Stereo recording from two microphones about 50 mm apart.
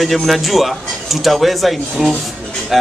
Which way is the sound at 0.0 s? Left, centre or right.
Centre.